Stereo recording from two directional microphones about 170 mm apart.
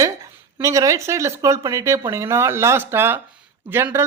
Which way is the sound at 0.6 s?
20° right (ahead or behind).